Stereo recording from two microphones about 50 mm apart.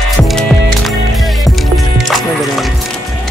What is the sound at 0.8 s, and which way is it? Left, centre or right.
Music, centre.